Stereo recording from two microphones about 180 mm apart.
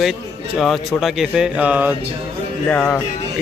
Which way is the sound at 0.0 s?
Centre (ahead or behind).